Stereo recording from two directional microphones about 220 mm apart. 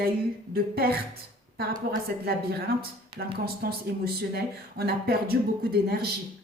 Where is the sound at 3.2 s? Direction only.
45° right (ahead or behind).